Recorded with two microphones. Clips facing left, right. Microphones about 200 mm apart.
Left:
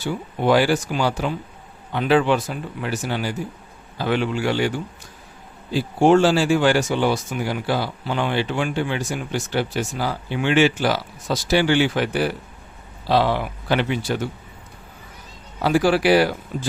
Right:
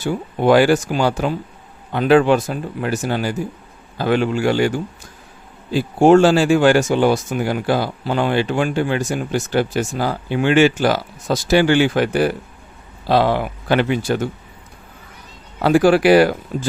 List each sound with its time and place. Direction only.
0.0 s speech: 50° right (ahead or behind)
15.6 s speech: 50° right (ahead or behind)